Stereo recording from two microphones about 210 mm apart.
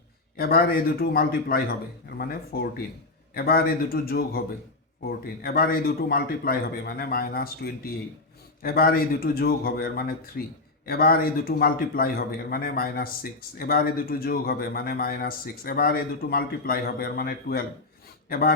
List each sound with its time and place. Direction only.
0.3 s speech: 45° left (ahead or behind)